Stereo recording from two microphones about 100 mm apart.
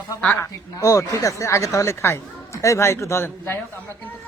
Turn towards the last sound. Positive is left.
turn(degrees=25)  # may be behind; listen again after turning